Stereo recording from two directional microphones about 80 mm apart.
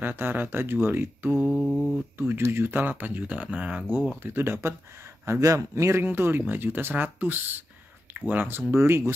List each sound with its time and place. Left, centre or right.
0.0 s speech: right
1.5 s mantra: centre
2.1 s speech: right
4.2 s speech: right